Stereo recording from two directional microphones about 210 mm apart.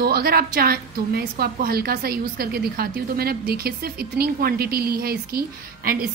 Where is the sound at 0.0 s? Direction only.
45° right (ahead or behind).